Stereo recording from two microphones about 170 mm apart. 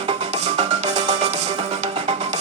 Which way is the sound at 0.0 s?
40° right (ahead or behind).